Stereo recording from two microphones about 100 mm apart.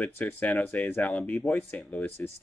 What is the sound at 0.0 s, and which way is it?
Speech, 15° left (ahead or behind).